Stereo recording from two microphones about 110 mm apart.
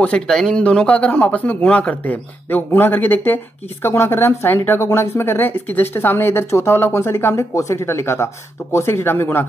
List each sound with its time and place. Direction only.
0.0 s a man's voice: 10° left (ahead or behind)